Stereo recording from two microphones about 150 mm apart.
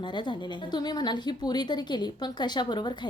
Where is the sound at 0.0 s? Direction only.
30° left (ahead or behind).